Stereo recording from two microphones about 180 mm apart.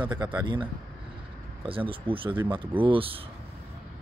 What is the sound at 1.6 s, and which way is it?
Speech, 30° right (ahead or behind).